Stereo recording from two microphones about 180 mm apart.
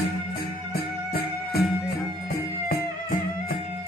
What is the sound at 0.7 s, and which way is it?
Music, 60° left (ahead or behind).